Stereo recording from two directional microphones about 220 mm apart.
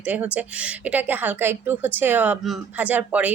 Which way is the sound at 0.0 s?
5° right (ahead or behind).